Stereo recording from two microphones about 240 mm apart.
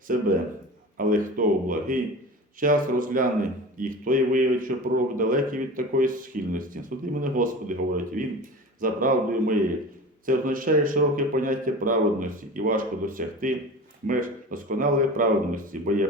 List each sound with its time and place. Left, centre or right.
0.1 s speech: right